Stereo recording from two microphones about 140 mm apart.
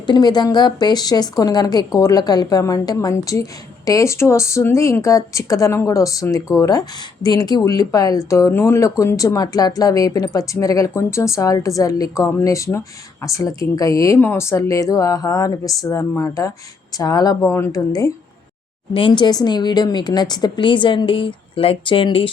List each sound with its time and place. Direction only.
0.0 s a woman's voice: 30° left (ahead or behind)